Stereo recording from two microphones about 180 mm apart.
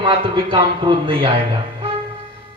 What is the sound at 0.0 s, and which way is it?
A man's voice, 25° right (ahead or behind).